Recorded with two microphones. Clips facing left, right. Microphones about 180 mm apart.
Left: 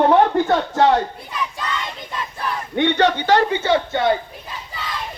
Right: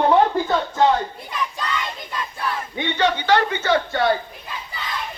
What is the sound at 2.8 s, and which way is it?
Speech, 65° left (ahead or behind).